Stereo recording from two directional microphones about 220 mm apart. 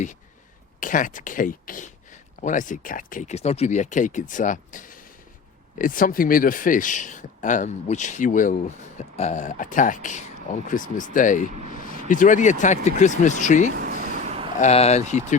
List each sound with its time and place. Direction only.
0.8 s a man's voice: 35° left (ahead or behind)
13.7 s a sound: 40° right (ahead or behind)
14.6 s a man's voice: 30° left (ahead or behind)